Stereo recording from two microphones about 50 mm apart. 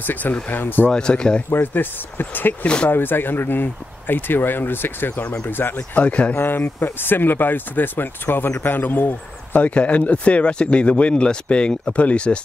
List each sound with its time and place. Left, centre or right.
0.0 s speech: left
0.9 s speech: centre
1.5 s speech: left
2.6 s speech: left
2.9 s speech: left
5.8 s speech: left
6.3 s speech: left
9.7 s speech: left